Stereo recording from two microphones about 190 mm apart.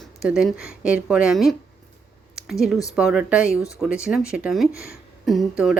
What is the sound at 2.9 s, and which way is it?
A woman's voice, 5° right (ahead or behind).